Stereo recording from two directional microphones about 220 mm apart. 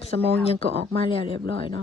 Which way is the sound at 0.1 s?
45° right (ahead or behind).